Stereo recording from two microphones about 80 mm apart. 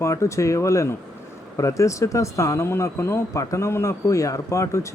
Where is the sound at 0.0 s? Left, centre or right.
Left.